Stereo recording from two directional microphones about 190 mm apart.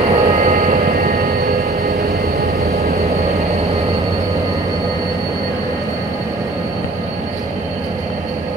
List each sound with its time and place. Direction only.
0.1 s vehicle: 40° right (ahead or behind)